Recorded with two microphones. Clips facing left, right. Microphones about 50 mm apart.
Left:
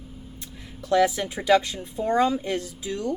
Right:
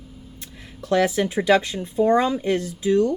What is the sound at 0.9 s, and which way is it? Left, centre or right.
Speech, right.